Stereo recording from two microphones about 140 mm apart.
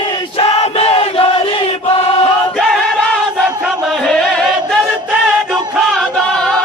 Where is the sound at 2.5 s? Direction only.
5° left (ahead or behind).